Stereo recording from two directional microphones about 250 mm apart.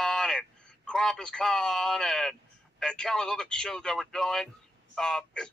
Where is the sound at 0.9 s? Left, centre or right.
Centre.